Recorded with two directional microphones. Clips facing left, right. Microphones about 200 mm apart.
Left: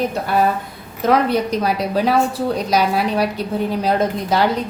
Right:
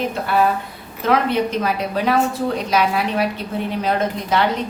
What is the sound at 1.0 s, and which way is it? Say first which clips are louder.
A woman's voice: left 2 dB; 40° left (ahead or behind).